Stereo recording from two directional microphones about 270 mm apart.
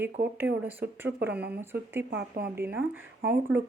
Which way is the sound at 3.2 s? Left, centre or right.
Right.